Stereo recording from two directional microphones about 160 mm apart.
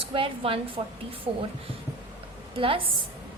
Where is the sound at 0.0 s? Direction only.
35° right (ahead or behind).